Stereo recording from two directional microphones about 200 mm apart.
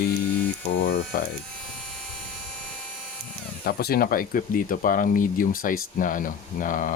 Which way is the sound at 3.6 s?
50° left (ahead or behind).